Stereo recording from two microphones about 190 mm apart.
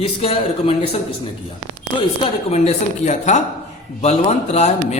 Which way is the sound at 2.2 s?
35° left (ahead or behind).